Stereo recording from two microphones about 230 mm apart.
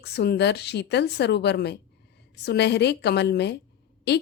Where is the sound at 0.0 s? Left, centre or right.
Left.